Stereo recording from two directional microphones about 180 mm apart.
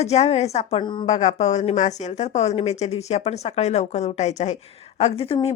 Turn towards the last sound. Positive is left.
turn(degrees=30)  # may be behind; listen again after turning